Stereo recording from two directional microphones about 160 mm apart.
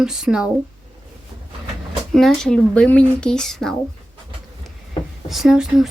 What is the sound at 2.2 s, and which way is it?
Speech, 5° left (ahead or behind).